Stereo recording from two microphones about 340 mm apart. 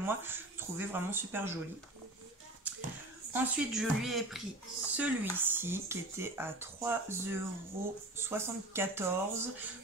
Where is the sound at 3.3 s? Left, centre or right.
Centre.